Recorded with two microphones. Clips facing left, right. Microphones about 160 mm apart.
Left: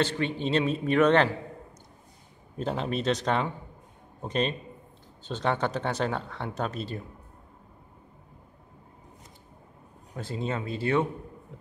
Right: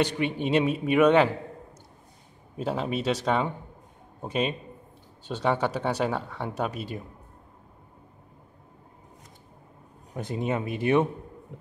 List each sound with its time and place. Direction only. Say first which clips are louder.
0.0 s speech: right 2 dB; 15° right (ahead or behind)
2.5 s speech: right 1 dB; 5° right (ahead or behind)
10.1 s speech: right 3 dB; 15° right (ahead or behind)